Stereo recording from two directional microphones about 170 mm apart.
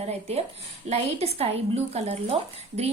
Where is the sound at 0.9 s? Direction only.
35° right (ahead or behind).